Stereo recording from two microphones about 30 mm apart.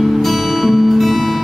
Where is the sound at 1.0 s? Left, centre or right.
Centre.